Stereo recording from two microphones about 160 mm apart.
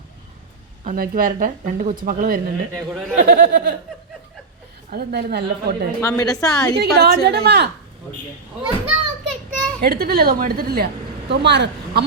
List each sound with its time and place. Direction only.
0.9 s a woman's voice: 60° right (ahead or behind); by 3.8 s 90° right
4.9 s a woman's voice: 80° right
6.0 s a woman's voice: 20° left (ahead or behind)
6.7 s a woman's voice: 85° right
8.9 s children playing: centre (ahead or behind)
9.8 s a woman's voice: 75° right (ahead or behind)
11.3 s a woman's voice: 90° right